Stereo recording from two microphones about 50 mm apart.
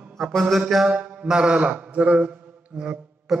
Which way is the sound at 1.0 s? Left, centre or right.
Centre.